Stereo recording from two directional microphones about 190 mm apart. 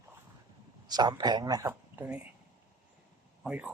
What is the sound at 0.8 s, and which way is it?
Speech, 20° right (ahead or behind).